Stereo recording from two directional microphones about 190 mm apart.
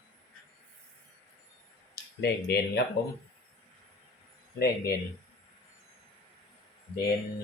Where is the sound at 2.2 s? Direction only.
60° left (ahead or behind).